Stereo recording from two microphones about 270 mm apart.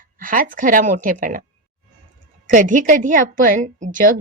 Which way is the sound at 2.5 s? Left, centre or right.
Right.